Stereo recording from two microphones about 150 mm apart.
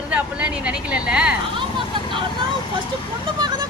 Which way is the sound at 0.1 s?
10° right (ahead or behind).